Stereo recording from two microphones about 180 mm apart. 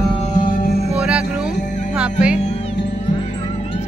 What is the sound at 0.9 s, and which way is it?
Music, 5° right (ahead or behind).